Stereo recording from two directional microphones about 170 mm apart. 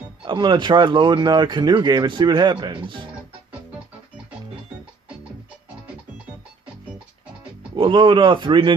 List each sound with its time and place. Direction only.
0.3 s speech: 25° right (ahead or behind)
7.8 s speech: 30° right (ahead or behind)